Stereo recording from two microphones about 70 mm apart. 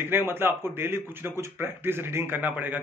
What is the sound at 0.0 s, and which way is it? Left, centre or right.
A man's voice, right.